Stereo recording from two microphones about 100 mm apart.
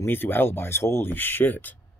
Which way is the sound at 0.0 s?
20° left (ahead or behind).